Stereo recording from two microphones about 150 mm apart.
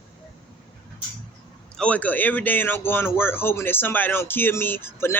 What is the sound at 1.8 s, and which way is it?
Speech, 10° left (ahead or behind).